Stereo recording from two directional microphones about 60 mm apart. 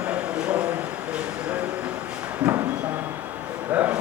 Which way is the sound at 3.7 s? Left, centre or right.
Right.